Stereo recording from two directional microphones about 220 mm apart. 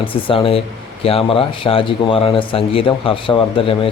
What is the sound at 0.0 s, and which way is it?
Speech, 25° left (ahead or behind).